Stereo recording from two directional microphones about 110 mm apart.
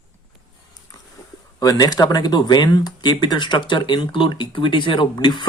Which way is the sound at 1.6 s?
35° left (ahead or behind).